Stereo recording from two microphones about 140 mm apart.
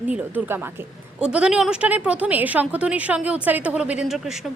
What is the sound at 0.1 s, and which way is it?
A woman's voice, 10° right (ahead or behind).